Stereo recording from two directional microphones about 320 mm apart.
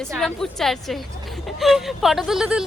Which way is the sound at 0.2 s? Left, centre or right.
Centre.